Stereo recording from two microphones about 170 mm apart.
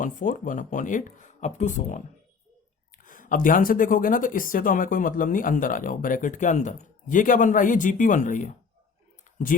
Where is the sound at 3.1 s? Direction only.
50° left (ahead or behind).